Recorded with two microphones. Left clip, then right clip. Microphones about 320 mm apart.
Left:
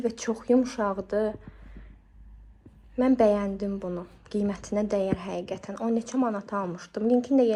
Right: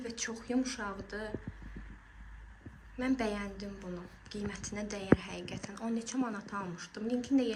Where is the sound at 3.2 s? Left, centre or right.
Centre.